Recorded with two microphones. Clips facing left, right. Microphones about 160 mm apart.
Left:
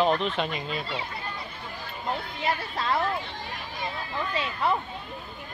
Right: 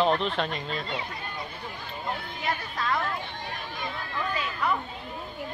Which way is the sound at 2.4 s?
30° left (ahead or behind).